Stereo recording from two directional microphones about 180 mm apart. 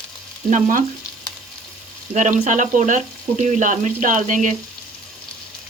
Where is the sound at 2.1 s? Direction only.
45° right (ahead or behind).